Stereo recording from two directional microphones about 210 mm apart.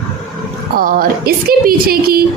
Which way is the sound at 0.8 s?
45° right (ahead or behind).